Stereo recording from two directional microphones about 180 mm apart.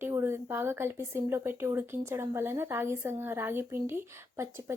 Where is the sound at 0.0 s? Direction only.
15° right (ahead or behind).